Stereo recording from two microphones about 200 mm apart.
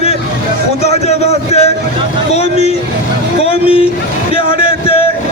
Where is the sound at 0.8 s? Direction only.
35° left (ahead or behind).